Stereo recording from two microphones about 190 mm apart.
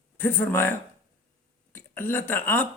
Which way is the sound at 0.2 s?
10° left (ahead or behind).